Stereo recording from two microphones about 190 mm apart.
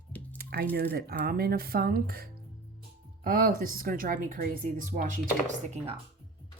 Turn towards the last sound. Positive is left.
turn(degrees=-40)  # may be behind; listen again after turning